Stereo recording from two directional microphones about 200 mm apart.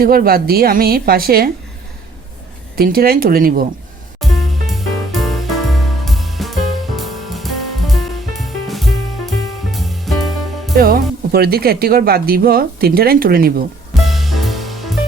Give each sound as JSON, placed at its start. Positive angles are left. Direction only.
{"t": 0.0, "sound": "speech", "side_deg": -50}
{"t": 2.7, "sound": "speech", "side_deg": -50}
{"t": 4.2, "sound": "music", "side_deg": 0}
{"t": 10.8, "sound": "speech", "side_deg": -50}
{"t": 14.0, "sound": "music", "side_deg": 0}